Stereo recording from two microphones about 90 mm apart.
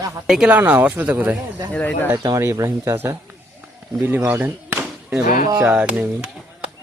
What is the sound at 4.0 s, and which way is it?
Speech, 20° right (ahead or behind).